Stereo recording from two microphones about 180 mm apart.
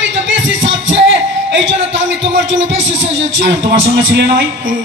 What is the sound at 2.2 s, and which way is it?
Speech, 90° right.